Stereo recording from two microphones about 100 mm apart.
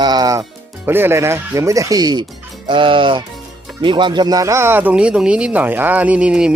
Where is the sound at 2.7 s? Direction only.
55° right (ahead or behind).